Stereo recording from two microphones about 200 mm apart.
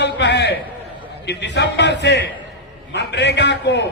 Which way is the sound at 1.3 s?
60° left (ahead or behind).